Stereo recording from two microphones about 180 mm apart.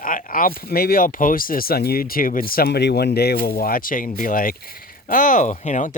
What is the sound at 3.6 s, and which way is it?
Speech, 50° left (ahead or behind).